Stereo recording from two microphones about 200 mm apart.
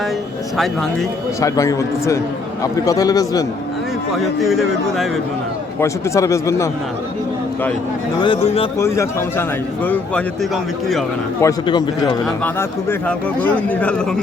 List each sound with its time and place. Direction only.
0.5 s a man's voice: centre (ahead or behind)
1.4 s a man's voice: 15° left (ahead or behind)
4.4 s a man's voice: centre (ahead or behind)
5.8 s a man's voice: 15° left (ahead or behind)
9.8 s a man's voice: 5° left (ahead or behind)
11.3 s a man's voice: 20° left (ahead or behind)
12.5 s a man's voice: 10° left (ahead or behind)